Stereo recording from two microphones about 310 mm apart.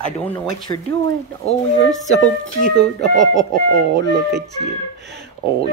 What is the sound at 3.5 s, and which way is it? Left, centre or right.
Speech, right.